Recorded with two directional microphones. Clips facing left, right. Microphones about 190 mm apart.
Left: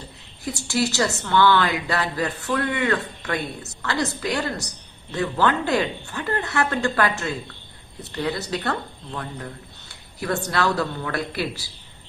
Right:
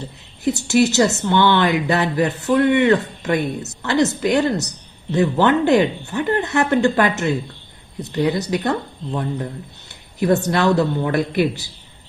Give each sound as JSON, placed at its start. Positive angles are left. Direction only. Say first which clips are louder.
{"t": 0.4, "sound": "speech", "louder": "right 8 dB", "side_deg": -20}